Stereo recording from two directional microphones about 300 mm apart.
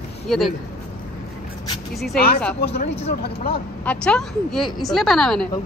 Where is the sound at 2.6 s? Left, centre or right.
Left.